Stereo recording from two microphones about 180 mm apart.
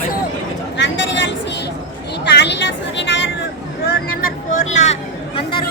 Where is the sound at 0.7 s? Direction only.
80° left.